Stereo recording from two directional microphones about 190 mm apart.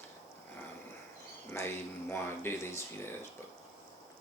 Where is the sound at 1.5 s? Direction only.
10° left (ahead or behind).